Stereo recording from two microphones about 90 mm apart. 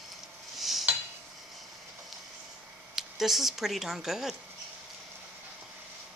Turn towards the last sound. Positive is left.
turn(degrees=-5)  # may be behind; listen again after turning